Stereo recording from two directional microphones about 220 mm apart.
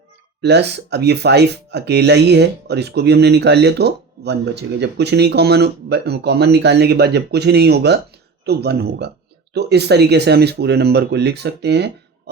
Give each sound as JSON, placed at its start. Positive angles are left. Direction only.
{"t": 0.4, "sound": "speech", "side_deg": -50}